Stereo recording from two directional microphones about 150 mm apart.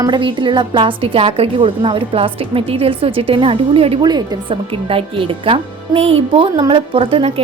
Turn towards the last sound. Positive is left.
turn(degrees=-40)  # may be behind; listen again after turning